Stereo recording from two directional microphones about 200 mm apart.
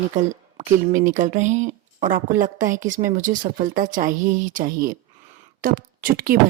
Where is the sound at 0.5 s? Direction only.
40° right (ahead or behind).